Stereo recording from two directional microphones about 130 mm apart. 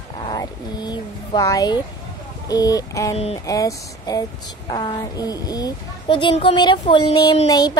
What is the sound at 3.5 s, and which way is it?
A child's voice, 25° left (ahead or behind).